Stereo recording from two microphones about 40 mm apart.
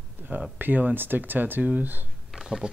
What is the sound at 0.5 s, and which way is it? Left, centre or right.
Speech, right.